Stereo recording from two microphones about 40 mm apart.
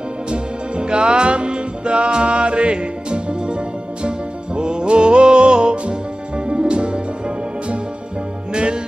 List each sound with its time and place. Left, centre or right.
0.3 s music: right